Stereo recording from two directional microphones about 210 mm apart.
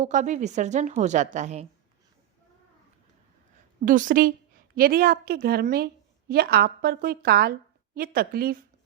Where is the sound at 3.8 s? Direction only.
40° right (ahead or behind).